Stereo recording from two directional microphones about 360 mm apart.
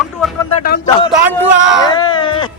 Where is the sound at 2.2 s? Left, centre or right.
Centre.